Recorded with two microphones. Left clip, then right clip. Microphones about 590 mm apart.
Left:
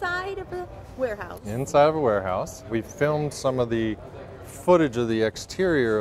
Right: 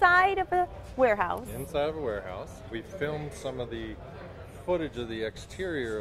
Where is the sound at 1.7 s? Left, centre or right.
Left.